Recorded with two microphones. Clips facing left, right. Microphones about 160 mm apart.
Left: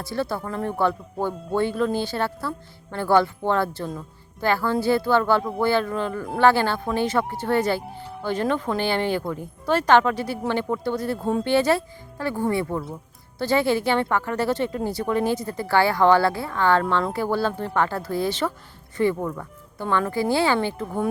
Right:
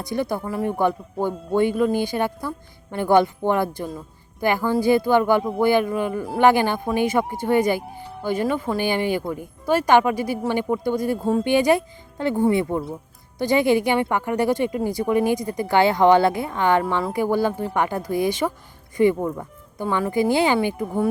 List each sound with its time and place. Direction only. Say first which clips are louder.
0.0 s speech: right 2 dB; 15° right (ahead or behind)